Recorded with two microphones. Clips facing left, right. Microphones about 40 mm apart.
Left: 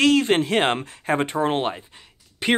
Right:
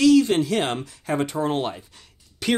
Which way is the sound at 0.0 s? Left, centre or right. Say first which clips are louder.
Right 1 dB; left.